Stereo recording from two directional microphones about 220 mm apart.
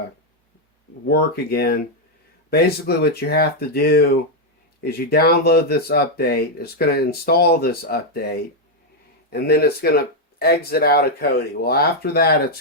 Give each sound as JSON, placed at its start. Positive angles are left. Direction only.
{"t": 1.0, "sound": "speech", "side_deg": 45}